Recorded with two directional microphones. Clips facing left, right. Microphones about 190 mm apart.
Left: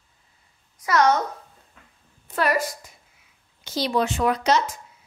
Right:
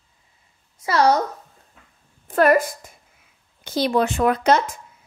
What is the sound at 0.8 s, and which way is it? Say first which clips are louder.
Speech: right 2 dB; 30° right (ahead or behind).